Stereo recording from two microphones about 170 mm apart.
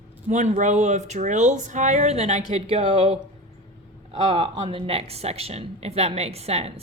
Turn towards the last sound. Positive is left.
turn(degrees=-35)  # may be behind; listen again after turning